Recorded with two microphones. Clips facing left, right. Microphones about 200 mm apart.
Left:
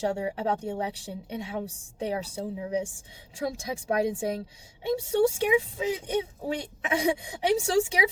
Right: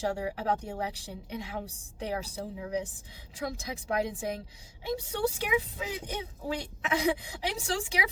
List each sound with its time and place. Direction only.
0.1 s speech: 25° left (ahead or behind)